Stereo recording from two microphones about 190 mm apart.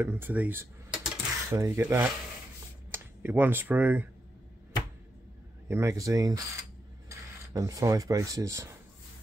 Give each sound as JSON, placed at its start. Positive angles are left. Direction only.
{"t": 0.0, "sound": "dishes", "side_deg": -10}
{"t": 1.6, "sound": "speech", "side_deg": -15}
{"t": 5.7, "sound": "speech", "side_deg": -15}